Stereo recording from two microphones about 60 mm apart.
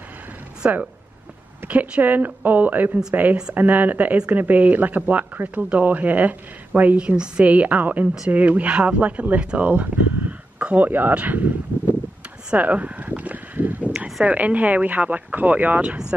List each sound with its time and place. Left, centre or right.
0.6 s speech: right
12.5 s speech: right
13.9 s speech: centre
14.2 s speech: right